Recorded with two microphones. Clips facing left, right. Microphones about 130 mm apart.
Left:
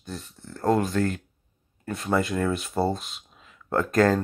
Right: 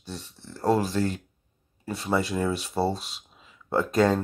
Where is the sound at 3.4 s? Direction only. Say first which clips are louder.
Even; 5° right (ahead or behind).